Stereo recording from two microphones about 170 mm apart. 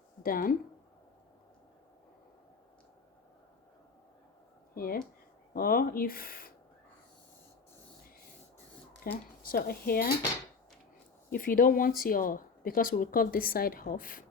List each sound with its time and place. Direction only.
0.2 s speech: 55° left (ahead or behind)
4.7 s speech: 60° left (ahead or behind)
9.1 s speech: 60° left (ahead or behind)
11.3 s speech: 60° left (ahead or behind)